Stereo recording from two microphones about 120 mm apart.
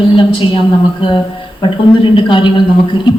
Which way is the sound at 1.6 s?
40° left (ahead or behind).